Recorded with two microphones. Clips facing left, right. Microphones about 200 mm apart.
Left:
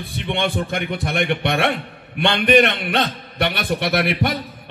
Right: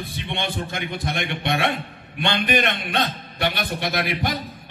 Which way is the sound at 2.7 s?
60° left (ahead or behind).